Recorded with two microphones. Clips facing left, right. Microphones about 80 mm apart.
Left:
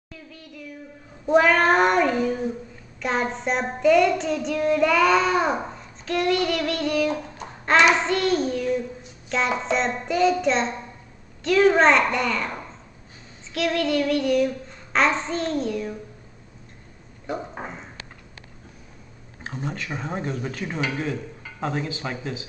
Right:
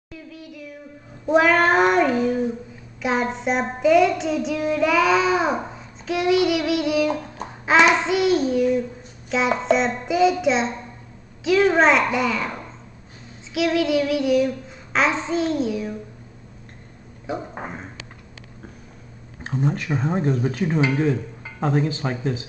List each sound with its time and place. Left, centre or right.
0.3 s child singing: centre
19.9 s speech: centre
20.6 s dishes: right
22.0 s speech: right